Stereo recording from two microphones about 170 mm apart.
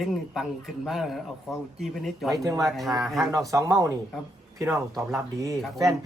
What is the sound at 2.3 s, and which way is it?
Speech, 20° right (ahead or behind).